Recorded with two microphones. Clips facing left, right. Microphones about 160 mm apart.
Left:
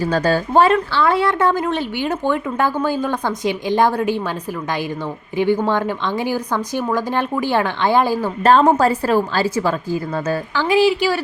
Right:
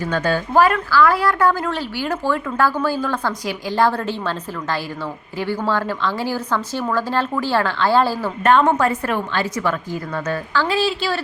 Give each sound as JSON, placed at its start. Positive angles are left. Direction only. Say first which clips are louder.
{"t": 0.0, "sound": "a woman's voice", "louder": "left 3 dB", "side_deg": 35}
{"t": 0.5, "sound": "speech", "louder": "even", "side_deg": 25}
{"t": 8.4, "sound": "a woman's voice", "louder": "left 2 dB", "side_deg": 35}
{"t": 10.5, "sound": "speech", "louder": "left 5 dB", "side_deg": 15}